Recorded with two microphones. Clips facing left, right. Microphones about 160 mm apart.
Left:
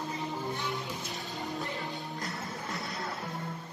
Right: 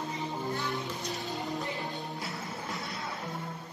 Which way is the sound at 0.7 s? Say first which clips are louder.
Right 2 dB; centre (ahead or behind).